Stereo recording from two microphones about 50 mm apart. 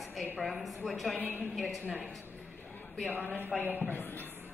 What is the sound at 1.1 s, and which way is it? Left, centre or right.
Speech, right.